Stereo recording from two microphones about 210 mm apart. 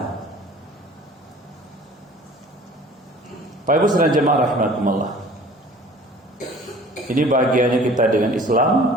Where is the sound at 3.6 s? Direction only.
40° right (ahead or behind).